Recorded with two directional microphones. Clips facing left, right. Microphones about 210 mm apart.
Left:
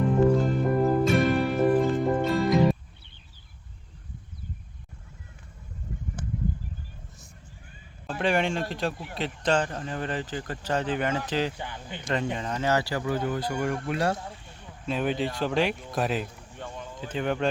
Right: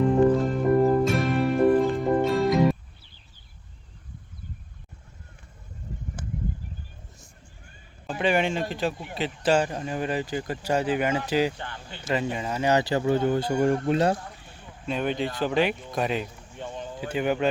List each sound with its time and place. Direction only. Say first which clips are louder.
0.3 s music: right 3 dB; centre (ahead or behind)
8.2 s speech: right 2 dB; centre (ahead or behind)
11.5 s speech: left 2 dB; 10° left (ahead or behind)
12.0 s speech: right 2 dB; 5° right (ahead or behind); by 14.2 s 25° right (ahead or behind)
14.4 s speech: even; centre (ahead or behind)
16.6 s a sound: right 3 dB; 20° right (ahead or behind)
17.0 s speech: right 2 dB; 10° right (ahead or behind)